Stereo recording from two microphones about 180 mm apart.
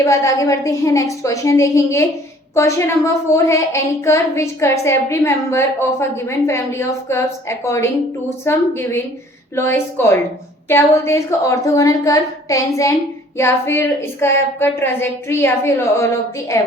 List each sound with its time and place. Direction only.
0.0 s a woman's voice: 20° left (ahead or behind)